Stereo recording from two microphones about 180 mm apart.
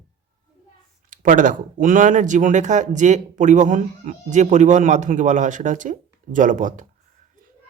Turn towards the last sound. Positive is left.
turn(degrees=-45)  # may be behind; listen again after turning